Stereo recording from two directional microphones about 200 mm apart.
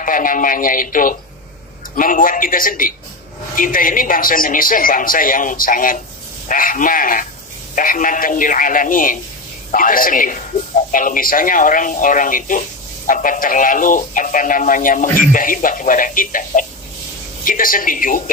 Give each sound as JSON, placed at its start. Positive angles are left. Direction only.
{"t": 0.0, "sound": "a man's voice", "side_deg": 40}